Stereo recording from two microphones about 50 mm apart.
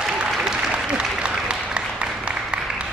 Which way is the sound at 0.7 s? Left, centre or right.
Right.